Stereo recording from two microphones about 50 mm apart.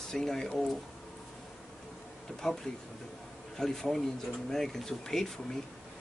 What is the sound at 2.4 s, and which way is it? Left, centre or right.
Speech, centre.